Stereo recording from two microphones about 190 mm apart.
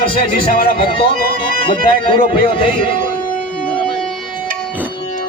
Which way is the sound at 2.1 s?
25° left (ahead or behind).